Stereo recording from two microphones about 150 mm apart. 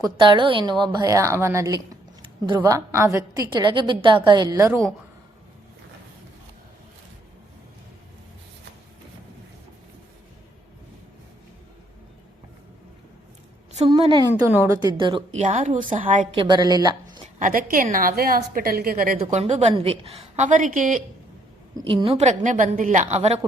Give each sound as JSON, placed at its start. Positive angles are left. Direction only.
{"t": 0.0, "sound": "a woman's voice", "side_deg": -30}
{"t": 3.5, "sound": "a woman's voice", "side_deg": -30}
{"t": 13.9, "sound": "a woman's voice", "side_deg": -30}
{"t": 14.4, "sound": "a woman's voice", "side_deg": -15}
{"t": 14.8, "sound": "a woman's voice", "side_deg": -30}
{"t": 15.3, "sound": "a woman's voice", "side_deg": -55}
{"t": 16.3, "sound": "speech", "side_deg": -30}
{"t": 17.4, "sound": "a woman's voice", "side_deg": -70}
{"t": 19.2, "sound": "a woman's voice", "side_deg": -45}
{"t": 21.8, "sound": "a woman's voice", "side_deg": -35}